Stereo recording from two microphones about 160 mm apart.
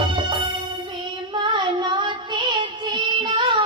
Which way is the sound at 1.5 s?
30° right (ahead or behind).